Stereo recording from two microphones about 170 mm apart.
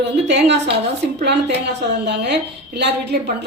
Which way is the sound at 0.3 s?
90° right.